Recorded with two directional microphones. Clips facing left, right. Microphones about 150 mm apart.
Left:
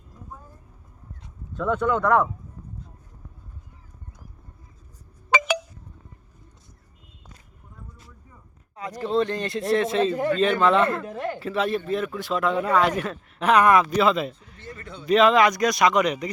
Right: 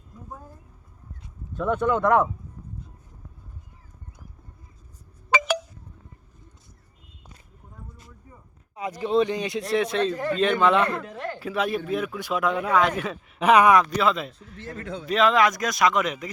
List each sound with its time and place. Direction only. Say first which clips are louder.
1.5 s speech: even; 15° right (ahead or behind)
5.4 s a sound: even; centre (ahead or behind)
8.7 s speech: right 1 dB; 5° right (ahead or behind)
14.6 s a man's voice: right 6 dB; 90° right
15.0 s speech: left 3 dB; centre (ahead or behind)